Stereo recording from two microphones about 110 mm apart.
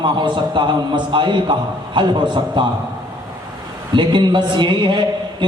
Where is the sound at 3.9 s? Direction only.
45° right (ahead or behind).